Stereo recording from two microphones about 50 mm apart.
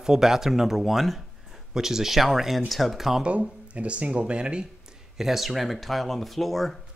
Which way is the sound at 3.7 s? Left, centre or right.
Right.